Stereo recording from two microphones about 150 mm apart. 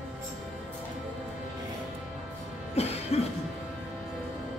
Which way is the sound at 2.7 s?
45° left (ahead or behind).